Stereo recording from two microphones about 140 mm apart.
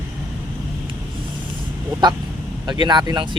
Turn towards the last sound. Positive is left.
turn(degrees=-35)  # may be behind; listen again after turning